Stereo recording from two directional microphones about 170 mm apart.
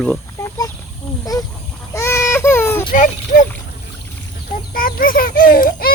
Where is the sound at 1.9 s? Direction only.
15° left (ahead or behind).